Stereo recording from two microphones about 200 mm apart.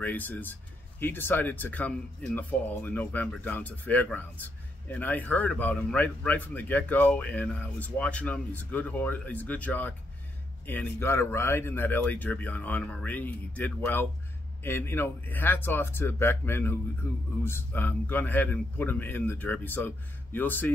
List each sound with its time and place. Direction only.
0.0 s speech: 10° left (ahead or behind)